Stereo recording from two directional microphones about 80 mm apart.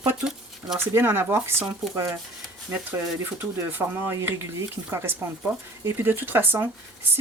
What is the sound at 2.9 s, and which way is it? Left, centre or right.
Speech, right.